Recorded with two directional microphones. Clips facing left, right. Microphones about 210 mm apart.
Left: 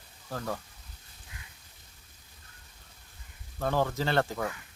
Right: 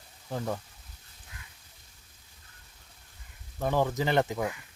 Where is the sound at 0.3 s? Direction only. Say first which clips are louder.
Right 2 dB; 15° right (ahead or behind).